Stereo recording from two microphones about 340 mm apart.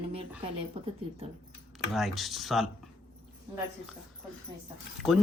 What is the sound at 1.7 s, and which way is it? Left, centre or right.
Speech, centre.